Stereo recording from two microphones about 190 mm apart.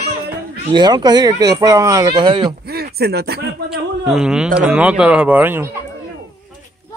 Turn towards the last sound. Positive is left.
turn(degrees=-10)  # may be behind; listen again after turning